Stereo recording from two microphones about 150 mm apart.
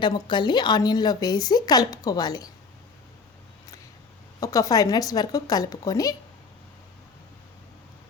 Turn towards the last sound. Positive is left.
turn(degrees=25)  # may be behind; listen again after turning